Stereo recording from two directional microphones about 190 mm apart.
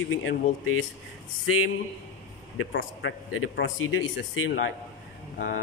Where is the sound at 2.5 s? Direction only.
85° left.